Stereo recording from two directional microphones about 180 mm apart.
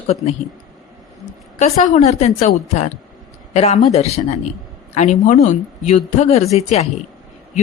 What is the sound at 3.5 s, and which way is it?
A woman's voice, 40° left (ahead or behind).